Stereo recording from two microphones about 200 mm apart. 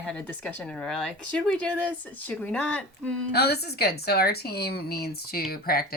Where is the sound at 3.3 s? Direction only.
55° left (ahead or behind).